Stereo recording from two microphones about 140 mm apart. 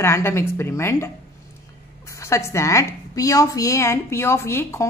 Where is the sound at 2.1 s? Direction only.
20° left (ahead or behind).